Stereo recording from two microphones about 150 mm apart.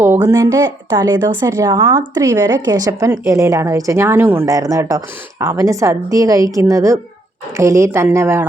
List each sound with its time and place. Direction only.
0.0 s a woman's voice: 15° right (ahead or behind)